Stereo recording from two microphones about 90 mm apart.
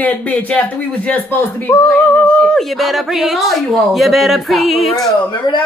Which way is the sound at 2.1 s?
20° left (ahead or behind).